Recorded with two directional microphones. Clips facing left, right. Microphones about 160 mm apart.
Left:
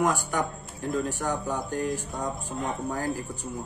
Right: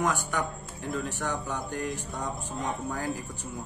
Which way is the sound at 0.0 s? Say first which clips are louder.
Left 3 dB; 10° left (ahead or behind).